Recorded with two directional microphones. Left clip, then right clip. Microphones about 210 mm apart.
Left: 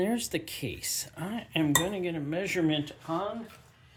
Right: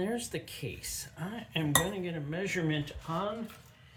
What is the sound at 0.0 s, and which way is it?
Speech, 40° left (ahead or behind).